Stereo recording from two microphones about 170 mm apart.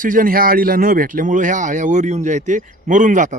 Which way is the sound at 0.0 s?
50° right (ahead or behind).